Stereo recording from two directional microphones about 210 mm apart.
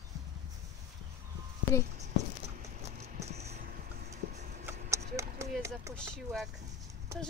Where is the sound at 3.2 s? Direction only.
30° right (ahead or behind).